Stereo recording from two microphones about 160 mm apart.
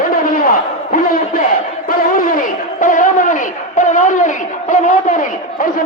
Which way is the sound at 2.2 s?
60° left (ahead or behind).